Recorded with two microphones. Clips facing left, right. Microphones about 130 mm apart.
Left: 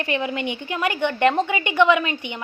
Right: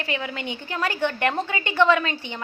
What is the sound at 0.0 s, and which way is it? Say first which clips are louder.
A woman's voice: left 5 dB; 20° left (ahead or behind).